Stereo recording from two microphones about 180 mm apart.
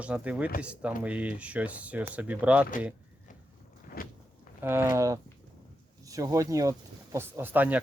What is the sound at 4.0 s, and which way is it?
Vehicle, 55° left (ahead or behind).